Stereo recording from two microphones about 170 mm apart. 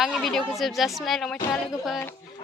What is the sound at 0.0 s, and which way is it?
Speech, centre (ahead or behind).